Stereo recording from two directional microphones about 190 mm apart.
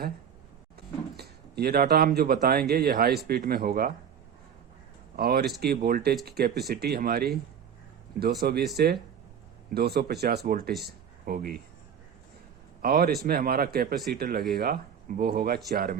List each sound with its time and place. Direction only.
1.1 s speech: 55° right (ahead or behind)
5.1 s speech: 55° right (ahead or behind)
12.8 s speech: 55° right (ahead or behind)